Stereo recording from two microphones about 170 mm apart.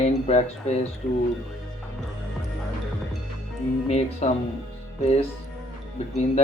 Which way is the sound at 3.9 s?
40° left (ahead or behind).